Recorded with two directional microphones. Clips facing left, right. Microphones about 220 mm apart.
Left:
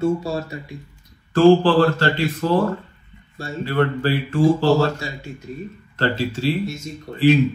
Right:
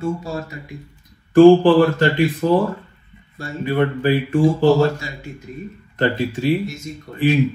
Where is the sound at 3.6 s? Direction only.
15° right (ahead or behind).